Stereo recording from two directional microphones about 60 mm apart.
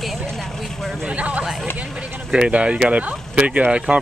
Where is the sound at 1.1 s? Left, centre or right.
Right.